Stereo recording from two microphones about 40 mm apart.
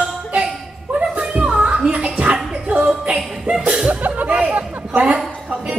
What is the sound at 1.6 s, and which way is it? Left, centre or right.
Music, right.